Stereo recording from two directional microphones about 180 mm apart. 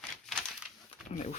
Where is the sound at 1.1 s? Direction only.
40° left (ahead or behind).